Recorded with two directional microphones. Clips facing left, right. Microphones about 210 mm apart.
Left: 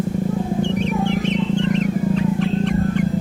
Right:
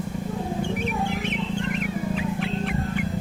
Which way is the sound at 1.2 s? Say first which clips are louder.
Left 8 dB; 10° right (ahead or behind).